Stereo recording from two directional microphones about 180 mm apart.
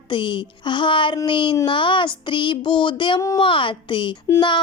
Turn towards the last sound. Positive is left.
turn(degrees=25)  # may be behind; listen again after turning